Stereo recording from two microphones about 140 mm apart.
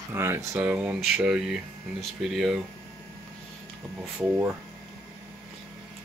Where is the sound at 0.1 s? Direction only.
20° right (ahead or behind); by 2.6 s centre (ahead or behind).